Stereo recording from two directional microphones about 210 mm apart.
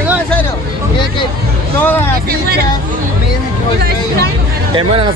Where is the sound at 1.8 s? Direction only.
10° left (ahead or behind).